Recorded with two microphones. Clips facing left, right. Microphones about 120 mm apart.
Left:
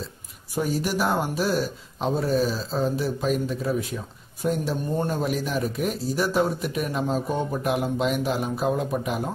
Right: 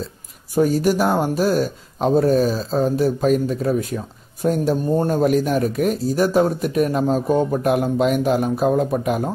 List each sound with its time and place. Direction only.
0.6 s speech: 45° right (ahead or behind)